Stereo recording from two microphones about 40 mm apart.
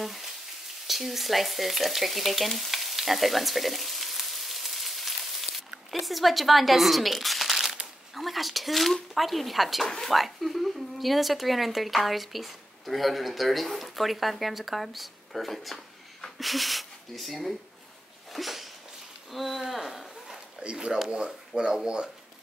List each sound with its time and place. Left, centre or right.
0.0 s frying: centre
5.9 s speech: centre
9.8 s speech: centre
18.3 s a sound: centre
20.7 s speech: right